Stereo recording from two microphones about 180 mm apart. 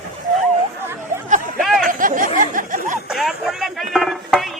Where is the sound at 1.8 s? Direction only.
50° right (ahead or behind).